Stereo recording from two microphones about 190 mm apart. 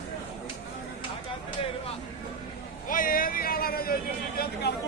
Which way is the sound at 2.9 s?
45° left (ahead or behind).